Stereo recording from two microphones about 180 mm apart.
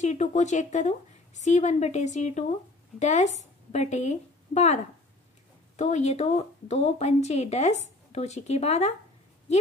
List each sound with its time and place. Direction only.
0.0 s a woman's voice: 40° left (ahead or behind)
5.8 s speech: 40° left (ahead or behind)